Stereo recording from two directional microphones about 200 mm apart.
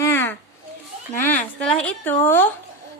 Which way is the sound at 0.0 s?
10° left (ahead or behind).